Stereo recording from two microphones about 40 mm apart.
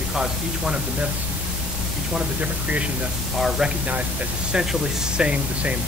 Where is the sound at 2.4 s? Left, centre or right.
Right.